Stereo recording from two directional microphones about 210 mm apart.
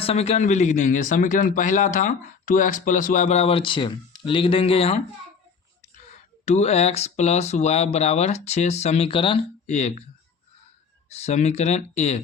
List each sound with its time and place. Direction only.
0.0 s a man's voice: 30° left (ahead or behind)
6.4 s a man's voice: 30° left (ahead or behind)
11.2 s a man's voice: 30° left (ahead or behind)